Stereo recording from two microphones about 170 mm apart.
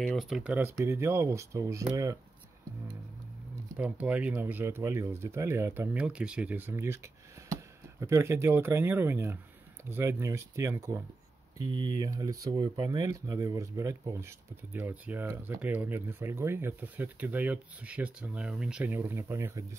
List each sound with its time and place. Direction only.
0.0 s speech: centre (ahead or behind); by 1.9 s 20° right (ahead or behind)
3.7 s speech: 5° right (ahead or behind)